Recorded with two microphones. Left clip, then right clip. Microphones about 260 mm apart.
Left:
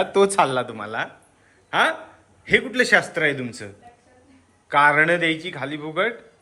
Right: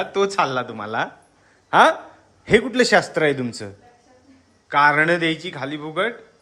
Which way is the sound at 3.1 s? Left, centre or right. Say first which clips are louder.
Right 2 dB; right.